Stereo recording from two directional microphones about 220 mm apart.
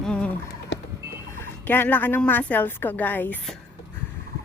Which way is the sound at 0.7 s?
55° left (ahead or behind).